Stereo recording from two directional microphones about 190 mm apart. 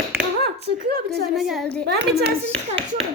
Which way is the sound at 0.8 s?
55° right (ahead or behind).